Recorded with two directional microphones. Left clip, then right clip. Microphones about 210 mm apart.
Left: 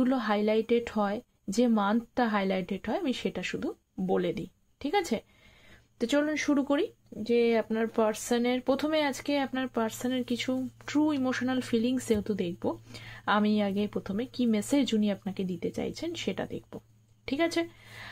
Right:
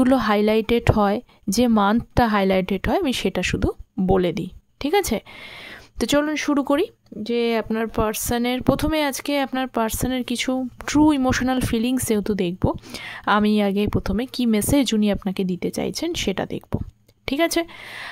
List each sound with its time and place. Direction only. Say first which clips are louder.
0.0 s speech: right 9 dB; 45° right (ahead or behind)